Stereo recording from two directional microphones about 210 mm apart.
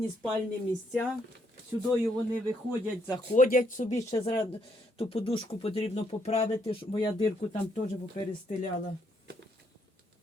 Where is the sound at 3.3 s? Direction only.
40° left (ahead or behind); by 7.3 s 25° left (ahead or behind).